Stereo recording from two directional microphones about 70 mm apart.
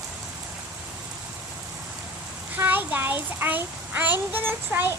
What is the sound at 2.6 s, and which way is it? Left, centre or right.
A child's voice, right.